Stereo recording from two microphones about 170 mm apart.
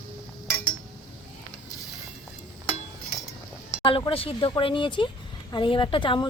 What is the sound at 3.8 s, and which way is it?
Speech, 35° left (ahead or behind).